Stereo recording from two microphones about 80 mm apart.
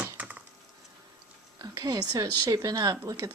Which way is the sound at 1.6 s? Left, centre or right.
Right.